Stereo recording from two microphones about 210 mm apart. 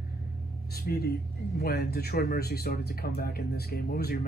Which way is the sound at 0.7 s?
45° left (ahead or behind).